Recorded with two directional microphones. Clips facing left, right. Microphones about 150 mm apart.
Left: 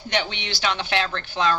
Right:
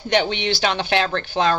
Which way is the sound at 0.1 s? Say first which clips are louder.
Right 7 dB; 45° right (ahead or behind).